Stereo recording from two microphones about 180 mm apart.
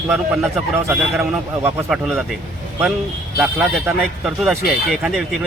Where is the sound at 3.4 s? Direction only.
5° right (ahead or behind).